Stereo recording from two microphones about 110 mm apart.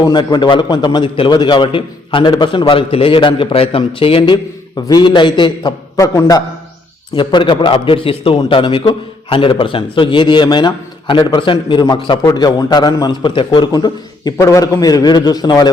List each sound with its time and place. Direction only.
0.0 s a man's voice: 40° left (ahead or behind)
4.9 s a man's voice: 45° left (ahead or behind)
6.0 s a man's voice: 30° left (ahead or behind)
7.2 s a man's voice: 45° left (ahead or behind)
13.7 s a man's voice: 35° left (ahead or behind)